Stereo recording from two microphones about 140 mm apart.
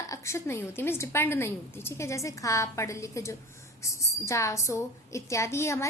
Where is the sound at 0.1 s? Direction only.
20° left (ahead or behind).